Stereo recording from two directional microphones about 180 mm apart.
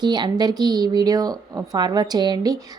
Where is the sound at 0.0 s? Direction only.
25° right (ahead or behind).